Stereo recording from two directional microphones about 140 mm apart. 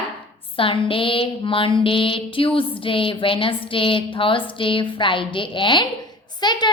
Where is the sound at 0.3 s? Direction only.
40° left (ahead or behind).